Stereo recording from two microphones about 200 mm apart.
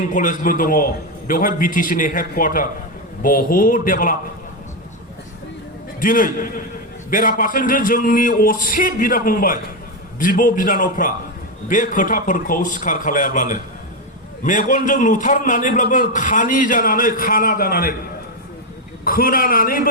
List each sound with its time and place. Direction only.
0.0 s a man's voice: 40° left (ahead or behind)
6.0 s a man's voice: 45° left (ahead or behind)
19.0 s a man's voice: 45° left (ahead or behind)